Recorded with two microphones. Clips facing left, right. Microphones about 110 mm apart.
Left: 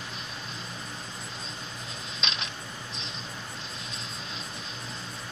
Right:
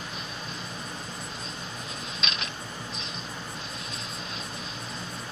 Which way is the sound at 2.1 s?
25° left (ahead or behind).